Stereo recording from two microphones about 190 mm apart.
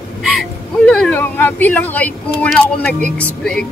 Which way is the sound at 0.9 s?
5° left (ahead or behind).